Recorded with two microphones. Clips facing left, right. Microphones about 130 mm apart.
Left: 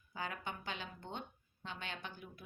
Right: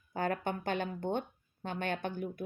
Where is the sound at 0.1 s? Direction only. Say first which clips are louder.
Right 10 dB; 50° right (ahead or behind).